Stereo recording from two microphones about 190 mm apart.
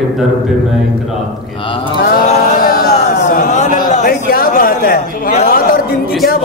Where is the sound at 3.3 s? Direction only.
40° left (ahead or behind).